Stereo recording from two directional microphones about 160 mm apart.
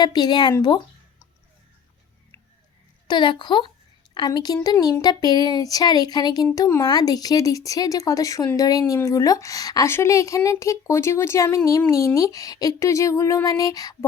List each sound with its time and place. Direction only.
0.0 s speech: 25° left (ahead or behind)
3.1 s speech: 30° left (ahead or behind)